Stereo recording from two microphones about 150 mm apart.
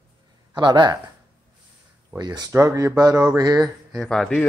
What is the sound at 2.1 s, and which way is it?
Speech, 25° right (ahead or behind).